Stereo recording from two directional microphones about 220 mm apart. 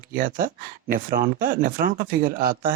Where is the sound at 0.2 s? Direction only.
40° right (ahead or behind).